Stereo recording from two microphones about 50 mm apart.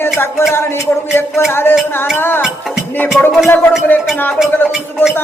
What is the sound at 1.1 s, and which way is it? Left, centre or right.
Music, left.